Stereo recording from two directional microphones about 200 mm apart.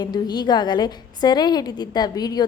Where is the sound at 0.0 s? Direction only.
20° left (ahead or behind).